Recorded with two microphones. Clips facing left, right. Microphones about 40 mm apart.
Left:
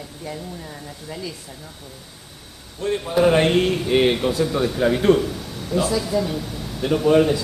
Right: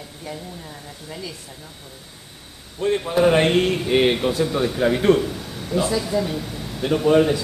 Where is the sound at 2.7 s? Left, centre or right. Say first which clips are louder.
Right 1 dB; right; by 7.4 s centre.